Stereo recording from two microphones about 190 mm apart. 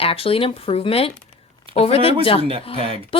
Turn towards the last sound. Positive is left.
turn(degrees=30)  # may be behind; listen again after turning